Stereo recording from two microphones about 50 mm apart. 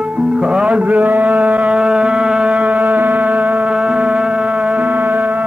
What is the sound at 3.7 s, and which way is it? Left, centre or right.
Music, right.